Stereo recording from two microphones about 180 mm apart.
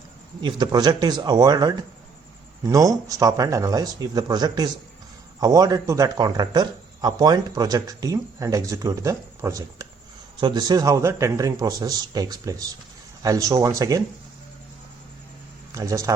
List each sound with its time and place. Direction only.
0.4 s speech: 25° right (ahead or behind)
15.7 s speech: 20° right (ahead or behind)